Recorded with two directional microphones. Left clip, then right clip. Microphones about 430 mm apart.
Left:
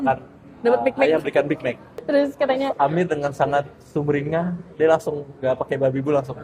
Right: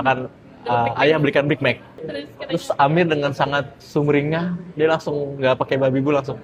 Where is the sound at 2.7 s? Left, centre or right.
Centre.